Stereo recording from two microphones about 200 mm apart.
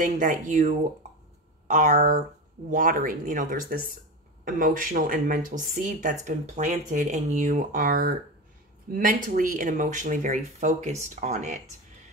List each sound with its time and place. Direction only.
0.0 s speech: 40° right (ahead or behind)